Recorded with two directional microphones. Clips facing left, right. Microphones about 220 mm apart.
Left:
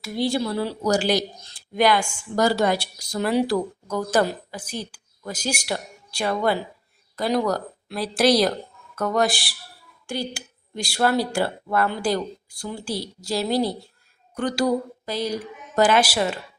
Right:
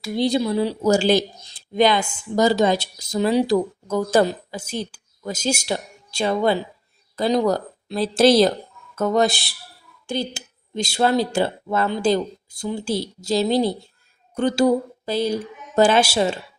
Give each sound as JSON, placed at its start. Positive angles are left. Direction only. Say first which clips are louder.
{"t": 0.3, "sound": "speech", "louder": "right 4 dB", "side_deg": -20}